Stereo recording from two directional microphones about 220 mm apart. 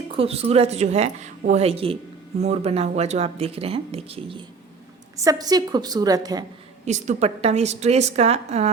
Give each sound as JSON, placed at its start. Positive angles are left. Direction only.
{"t": 0.1, "sound": "a woman's voice", "side_deg": -25}
{"t": 6.8, "sound": "speech", "side_deg": -30}